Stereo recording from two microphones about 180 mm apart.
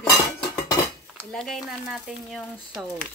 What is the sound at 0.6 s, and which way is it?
Cutlery, 15° left (ahead or behind).